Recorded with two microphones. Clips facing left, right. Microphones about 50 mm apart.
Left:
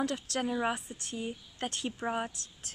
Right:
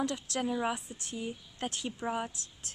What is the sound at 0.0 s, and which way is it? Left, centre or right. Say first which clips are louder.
Speech: left 1 dB; left.